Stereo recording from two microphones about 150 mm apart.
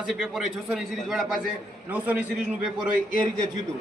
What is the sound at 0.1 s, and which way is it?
A man's voice, centre (ahead or behind).